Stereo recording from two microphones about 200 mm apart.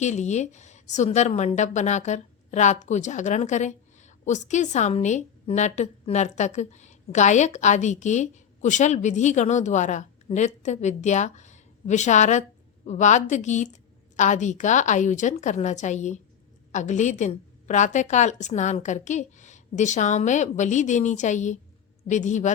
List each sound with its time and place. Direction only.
0.0 s a woman's voice: 35° left (ahead or behind)